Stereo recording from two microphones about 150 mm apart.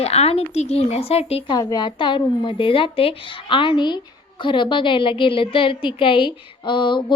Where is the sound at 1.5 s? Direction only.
25° left (ahead or behind).